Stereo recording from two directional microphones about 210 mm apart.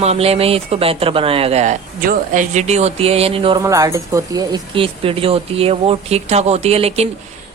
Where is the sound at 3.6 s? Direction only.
15° right (ahead or behind).